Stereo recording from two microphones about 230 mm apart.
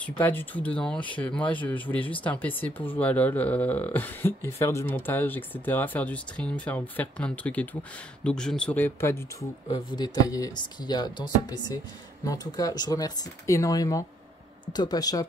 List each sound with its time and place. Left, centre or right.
0.2 s speech: centre